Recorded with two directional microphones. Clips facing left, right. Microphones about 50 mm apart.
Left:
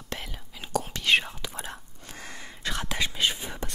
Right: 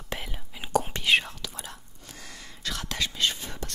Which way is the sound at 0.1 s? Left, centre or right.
Centre.